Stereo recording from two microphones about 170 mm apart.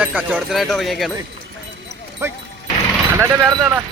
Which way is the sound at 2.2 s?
15° right (ahead or behind).